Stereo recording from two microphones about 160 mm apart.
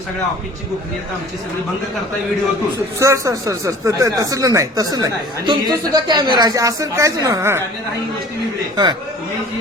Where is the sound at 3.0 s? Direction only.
20° right (ahead or behind).